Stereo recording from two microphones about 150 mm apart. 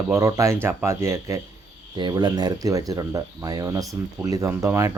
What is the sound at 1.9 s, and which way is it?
Speech, 30° right (ahead or behind).